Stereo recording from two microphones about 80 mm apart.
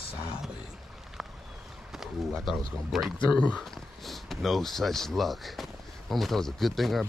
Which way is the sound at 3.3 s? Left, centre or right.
Centre.